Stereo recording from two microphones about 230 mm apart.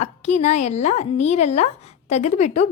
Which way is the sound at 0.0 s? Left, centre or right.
Left.